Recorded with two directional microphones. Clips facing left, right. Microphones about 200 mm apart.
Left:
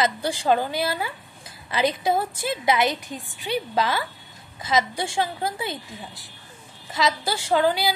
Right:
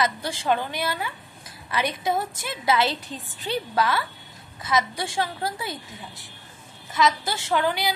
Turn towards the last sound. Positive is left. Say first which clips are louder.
# left 3 dB
turn(degrees=30)  # may be behind; listen again after turning